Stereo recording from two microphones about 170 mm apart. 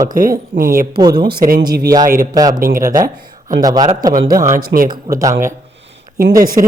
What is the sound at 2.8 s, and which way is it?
A man's voice, 20° right (ahead or behind).